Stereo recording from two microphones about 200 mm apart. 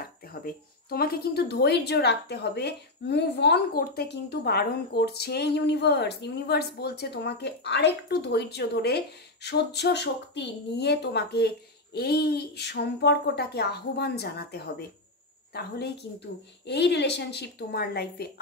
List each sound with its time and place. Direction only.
0.3 s speech: 50° left (ahead or behind)